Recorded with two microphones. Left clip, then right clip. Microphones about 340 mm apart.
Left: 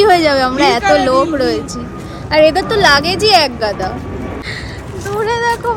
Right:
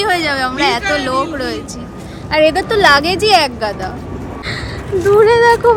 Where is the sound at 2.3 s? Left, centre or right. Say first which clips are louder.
Left 2 dB; centre.